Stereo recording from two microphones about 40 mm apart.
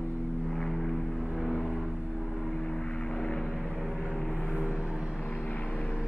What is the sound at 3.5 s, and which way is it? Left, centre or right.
Vehicle, centre.